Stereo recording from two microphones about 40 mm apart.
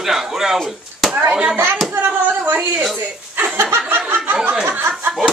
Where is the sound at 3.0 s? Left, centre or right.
Right.